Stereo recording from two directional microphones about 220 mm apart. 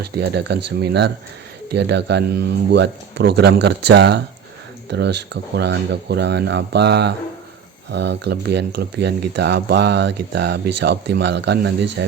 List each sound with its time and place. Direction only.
0.0 s speech: 50° right (ahead or behind)